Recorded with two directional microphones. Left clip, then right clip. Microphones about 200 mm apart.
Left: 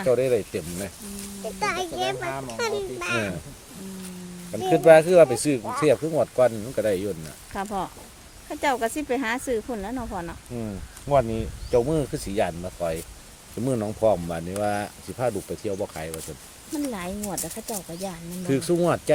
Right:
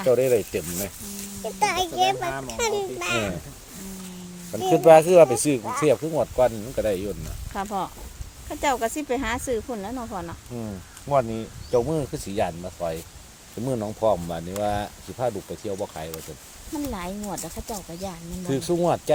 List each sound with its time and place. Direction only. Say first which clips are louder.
0.1 s speech: right 2 dB; 10° right (ahead or behind)
4.5 s speech: right 1 dB; 10° right (ahead or behind)
6.3 s speech: right 1 dB; 10° left (ahead or behind)